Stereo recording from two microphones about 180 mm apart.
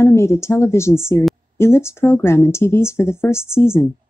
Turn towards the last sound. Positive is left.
turn(degrees=15)  # may be behind; listen again after turning